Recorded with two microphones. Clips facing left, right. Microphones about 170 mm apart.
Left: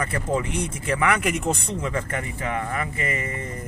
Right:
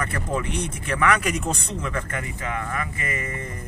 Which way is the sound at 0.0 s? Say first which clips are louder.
Left 2 dB; 25° left (ahead or behind).